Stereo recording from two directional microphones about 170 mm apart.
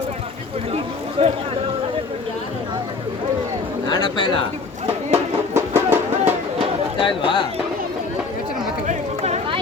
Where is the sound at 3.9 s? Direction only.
25° left (ahead or behind).